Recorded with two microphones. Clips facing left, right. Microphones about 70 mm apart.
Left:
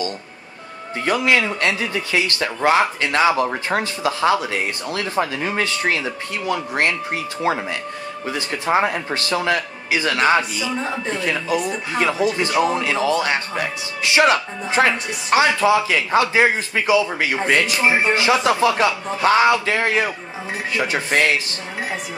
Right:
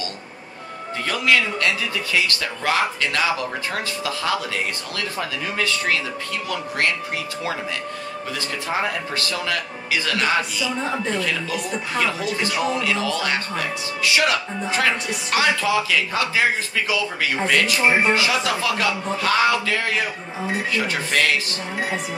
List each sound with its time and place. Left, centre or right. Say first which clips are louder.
1.0 s a man's voice: left 2 dB; left
8.3 s a man's voice: left 7 dB; left